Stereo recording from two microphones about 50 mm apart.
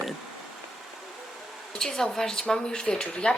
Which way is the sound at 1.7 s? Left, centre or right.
Centre.